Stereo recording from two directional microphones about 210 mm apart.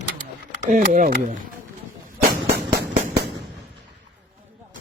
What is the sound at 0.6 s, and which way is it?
Speech, 35° right (ahead or behind).